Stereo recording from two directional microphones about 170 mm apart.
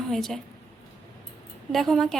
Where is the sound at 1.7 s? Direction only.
Centre (ahead or behind).